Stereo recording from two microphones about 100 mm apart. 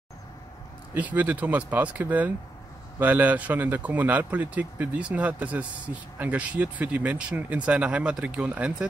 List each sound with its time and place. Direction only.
0.9 s a man's voice: 15° right (ahead or behind)